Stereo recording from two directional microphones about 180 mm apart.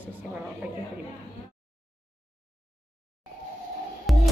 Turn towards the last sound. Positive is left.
turn(degrees=0)  # may be behind; listen again after turning